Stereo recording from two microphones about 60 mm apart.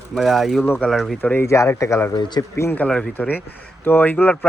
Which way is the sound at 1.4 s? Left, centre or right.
Left.